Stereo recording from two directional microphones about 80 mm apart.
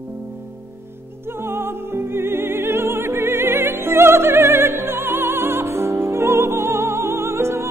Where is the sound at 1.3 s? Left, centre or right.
Right.